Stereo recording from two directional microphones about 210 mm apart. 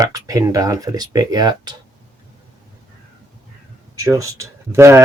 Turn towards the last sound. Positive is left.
turn(degrees=-15)  # may be behind; listen again after turning